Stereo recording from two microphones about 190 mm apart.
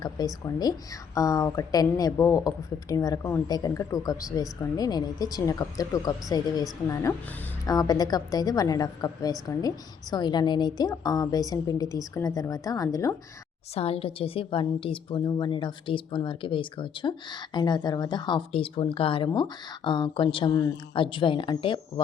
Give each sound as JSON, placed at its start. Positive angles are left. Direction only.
{"t": 0.2, "sound": "speech", "side_deg": 20}
{"t": 13.7, "sound": "speech", "side_deg": 30}